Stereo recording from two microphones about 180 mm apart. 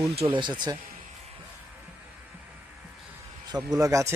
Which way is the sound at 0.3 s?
25° right (ahead or behind).